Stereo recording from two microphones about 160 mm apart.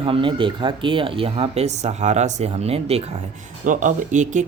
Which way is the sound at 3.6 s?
55° right (ahead or behind).